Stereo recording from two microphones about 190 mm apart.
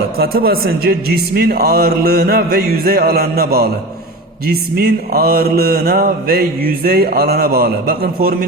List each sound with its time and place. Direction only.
0.2 s mantra: 50° right (ahead or behind)